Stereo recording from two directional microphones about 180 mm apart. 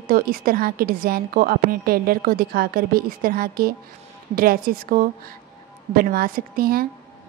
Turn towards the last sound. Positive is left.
turn(degrees=-55)  # may be behind; listen again after turning